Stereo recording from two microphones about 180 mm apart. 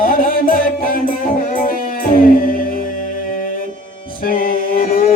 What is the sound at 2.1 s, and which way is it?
Music, 50° left (ahead or behind).